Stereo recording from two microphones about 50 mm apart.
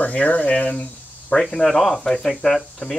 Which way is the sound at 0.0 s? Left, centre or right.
Left.